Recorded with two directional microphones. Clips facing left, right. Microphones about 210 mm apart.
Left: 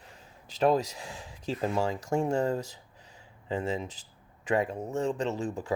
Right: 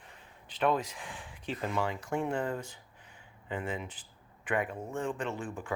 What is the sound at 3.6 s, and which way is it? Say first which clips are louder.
Speech: left 5 dB; 40° left (ahead or behind).